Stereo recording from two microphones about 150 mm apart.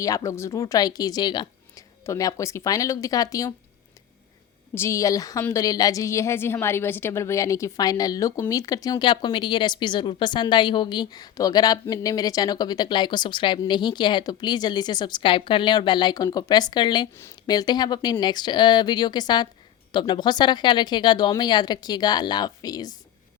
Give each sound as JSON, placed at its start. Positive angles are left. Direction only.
{"t": 0.0, "sound": "a woman's voice", "side_deg": 20}
{"t": 4.7, "sound": "a woman's voice", "side_deg": 20}